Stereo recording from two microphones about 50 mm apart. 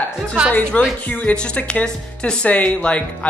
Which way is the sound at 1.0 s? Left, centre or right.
Left.